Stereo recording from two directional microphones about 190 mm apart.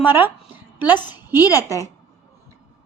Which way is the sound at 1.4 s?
20° left (ahead or behind).